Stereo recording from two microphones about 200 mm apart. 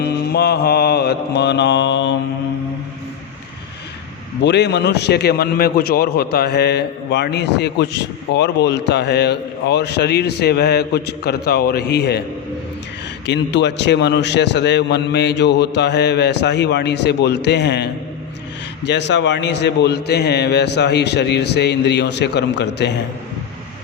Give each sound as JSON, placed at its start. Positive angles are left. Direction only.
{"t": 0.0, "sound": "mantra", "side_deg": 55}
{"t": 4.4, "sound": "a man's voice", "side_deg": 60}
{"t": 13.2, "sound": "a man's voice", "side_deg": 60}
{"t": 18.9, "sound": "a man's voice", "side_deg": 60}